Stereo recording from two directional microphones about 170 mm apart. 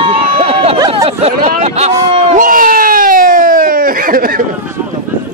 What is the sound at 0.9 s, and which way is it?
Speech, 35° right (ahead or behind).